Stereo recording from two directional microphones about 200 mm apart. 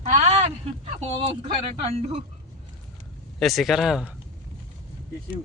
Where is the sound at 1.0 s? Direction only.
30° right (ahead or behind).